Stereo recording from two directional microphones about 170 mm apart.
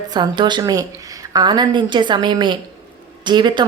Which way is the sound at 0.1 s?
25° right (ahead or behind).